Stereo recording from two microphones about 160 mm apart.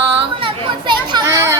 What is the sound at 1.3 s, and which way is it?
Children playing, 20° right (ahead or behind).